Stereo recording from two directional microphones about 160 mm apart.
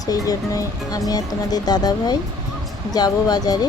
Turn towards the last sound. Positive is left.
turn(degrees=25)  # may be behind; listen again after turning